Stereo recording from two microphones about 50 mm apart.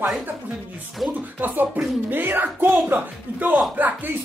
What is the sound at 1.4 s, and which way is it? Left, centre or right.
A woman's voice, right.